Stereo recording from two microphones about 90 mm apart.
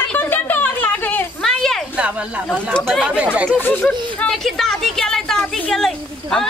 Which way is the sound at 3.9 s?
5° left (ahead or behind).